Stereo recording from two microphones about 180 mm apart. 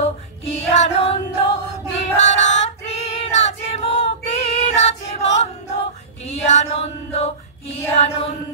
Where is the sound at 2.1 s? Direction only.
90° left.